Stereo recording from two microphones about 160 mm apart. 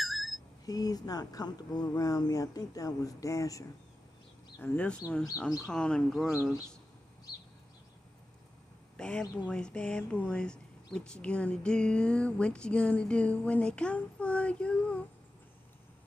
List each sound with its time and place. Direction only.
0.0 s a sound: centre (ahead or behind)
0.7 s speech: 25° left (ahead or behind)
4.6 s speech: 10° left (ahead or behind)
8.9 s speech: 5° left (ahead or behind)